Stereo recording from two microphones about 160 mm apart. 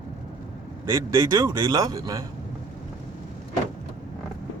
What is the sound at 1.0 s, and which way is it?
Speech, 20° right (ahead or behind).